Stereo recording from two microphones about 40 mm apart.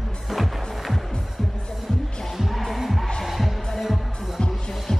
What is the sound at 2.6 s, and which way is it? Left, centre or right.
Music, centre.